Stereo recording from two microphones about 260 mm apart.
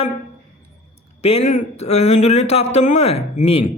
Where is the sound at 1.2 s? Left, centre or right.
Left.